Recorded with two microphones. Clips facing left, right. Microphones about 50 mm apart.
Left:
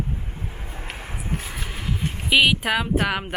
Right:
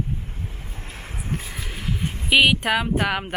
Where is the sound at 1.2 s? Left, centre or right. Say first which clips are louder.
Right 1 dB; centre.